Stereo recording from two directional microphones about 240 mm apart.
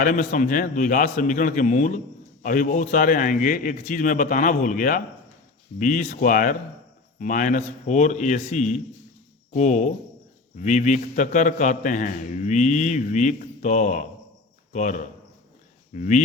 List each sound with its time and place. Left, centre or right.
0.0 s a man's voice: left